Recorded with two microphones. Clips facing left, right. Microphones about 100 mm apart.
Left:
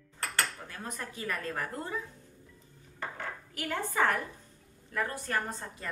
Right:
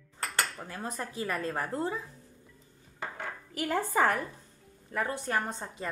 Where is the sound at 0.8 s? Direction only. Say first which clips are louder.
Right 4 dB; 30° right (ahead or behind).